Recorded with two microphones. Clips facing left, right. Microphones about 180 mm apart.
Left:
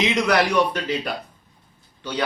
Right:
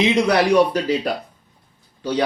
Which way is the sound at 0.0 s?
30° right (ahead or behind).